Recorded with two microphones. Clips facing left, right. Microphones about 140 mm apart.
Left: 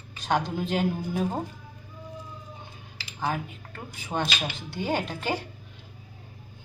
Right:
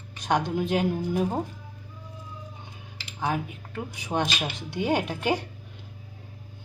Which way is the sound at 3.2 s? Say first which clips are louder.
Right 1 dB; 15° right (ahead or behind).